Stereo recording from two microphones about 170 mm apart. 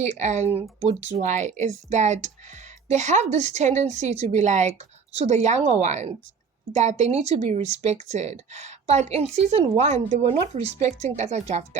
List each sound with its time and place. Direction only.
0.0 s speech: 40° right (ahead or behind)